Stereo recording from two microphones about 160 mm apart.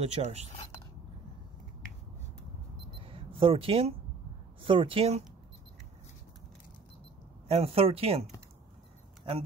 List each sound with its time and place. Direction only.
0.0 s speech: 40° right (ahead or behind)
3.1 s a sound: 35° right (ahead or behind)
4.6 s speech: 35° right (ahead or behind)
7.4 s speech: 40° right (ahead or behind)